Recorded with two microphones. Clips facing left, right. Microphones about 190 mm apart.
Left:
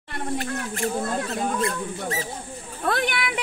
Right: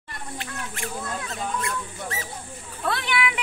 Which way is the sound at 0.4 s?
40° left (ahead or behind).